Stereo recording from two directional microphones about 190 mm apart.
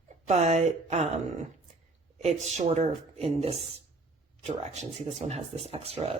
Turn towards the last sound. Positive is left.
turn(degrees=-30)  # may be behind; listen again after turning